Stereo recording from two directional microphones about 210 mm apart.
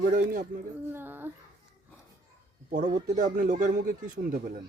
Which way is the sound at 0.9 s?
10° right (ahead or behind).